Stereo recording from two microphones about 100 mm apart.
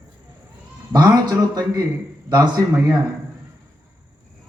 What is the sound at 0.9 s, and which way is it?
A man's voice, 45° right (ahead or behind).